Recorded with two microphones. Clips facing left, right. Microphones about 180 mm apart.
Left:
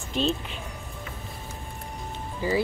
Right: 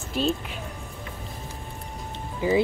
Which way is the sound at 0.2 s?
10° right (ahead or behind).